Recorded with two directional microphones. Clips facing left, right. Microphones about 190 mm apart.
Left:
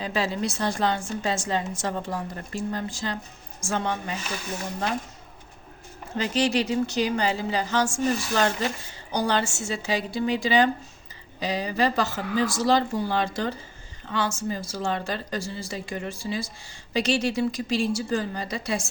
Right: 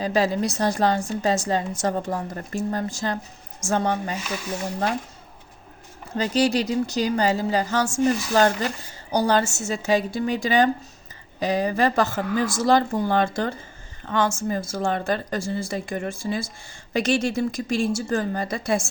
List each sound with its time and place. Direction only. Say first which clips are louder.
0.0 s a woman's voice: right 5 dB; 40° right (ahead or behind)
6.1 s a woman's voice: right 3 dB; 40° right (ahead or behind)